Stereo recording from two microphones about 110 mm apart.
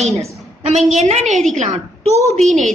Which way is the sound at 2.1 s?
30° right (ahead or behind).